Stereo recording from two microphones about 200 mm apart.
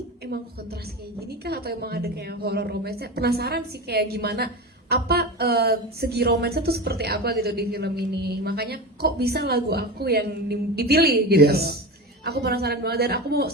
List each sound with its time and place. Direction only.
1.3 s a woman's voice: 50° right (ahead or behind)